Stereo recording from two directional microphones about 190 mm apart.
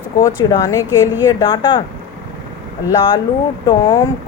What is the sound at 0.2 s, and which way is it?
A woman's voice, 15° left (ahead or behind).